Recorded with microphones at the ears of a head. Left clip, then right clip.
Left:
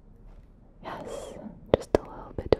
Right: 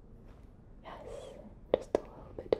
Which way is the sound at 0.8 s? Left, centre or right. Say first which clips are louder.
Left 8 dB; left.